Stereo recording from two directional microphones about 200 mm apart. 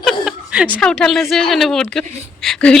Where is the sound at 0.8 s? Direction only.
5° left (ahead or behind).